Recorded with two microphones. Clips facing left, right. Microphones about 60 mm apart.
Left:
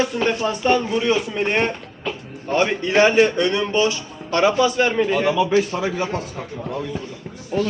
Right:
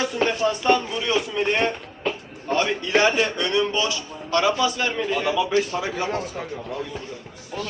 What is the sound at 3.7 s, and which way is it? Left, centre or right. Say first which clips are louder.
A man's voice: left 5 dB; left.